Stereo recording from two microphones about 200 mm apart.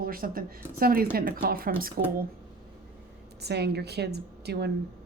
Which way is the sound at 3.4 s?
55° right (ahead or behind).